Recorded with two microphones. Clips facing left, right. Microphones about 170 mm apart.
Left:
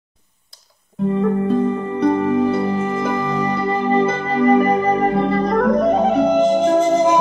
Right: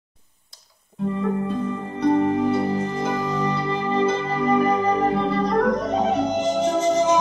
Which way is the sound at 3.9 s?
55° left (ahead or behind).